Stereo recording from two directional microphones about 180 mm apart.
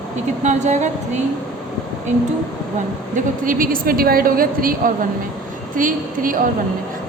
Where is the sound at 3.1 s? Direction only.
50° right (ahead or behind).